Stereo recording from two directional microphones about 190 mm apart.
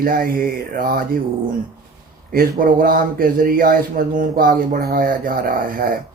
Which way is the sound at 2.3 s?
50° right (ahead or behind).